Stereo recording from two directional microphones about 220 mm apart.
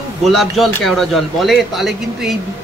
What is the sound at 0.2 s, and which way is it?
Speech, centre (ahead or behind).